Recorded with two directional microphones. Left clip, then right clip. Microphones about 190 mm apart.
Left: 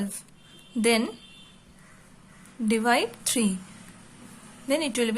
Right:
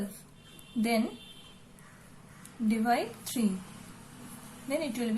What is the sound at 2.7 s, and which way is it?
Speech, 45° left (ahead or behind).